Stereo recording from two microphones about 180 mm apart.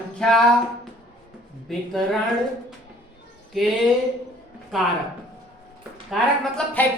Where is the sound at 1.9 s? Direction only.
Centre (ahead or behind).